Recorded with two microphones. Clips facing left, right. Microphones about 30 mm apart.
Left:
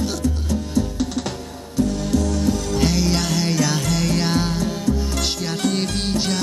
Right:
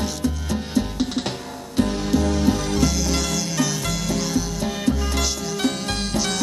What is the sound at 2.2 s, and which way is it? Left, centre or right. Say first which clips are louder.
Music: right 1 dB; right.